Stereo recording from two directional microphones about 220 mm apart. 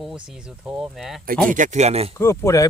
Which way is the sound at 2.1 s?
10° left (ahead or behind).